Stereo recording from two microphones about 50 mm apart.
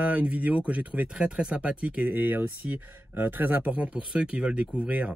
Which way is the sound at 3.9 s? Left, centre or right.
Centre.